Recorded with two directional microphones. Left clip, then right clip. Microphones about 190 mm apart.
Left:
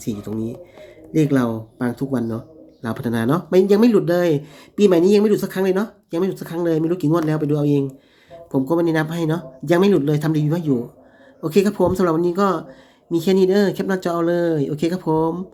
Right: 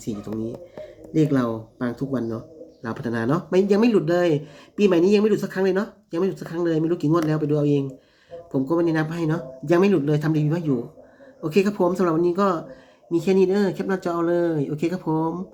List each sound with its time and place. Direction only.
0.0 s speech: 20° left (ahead or behind)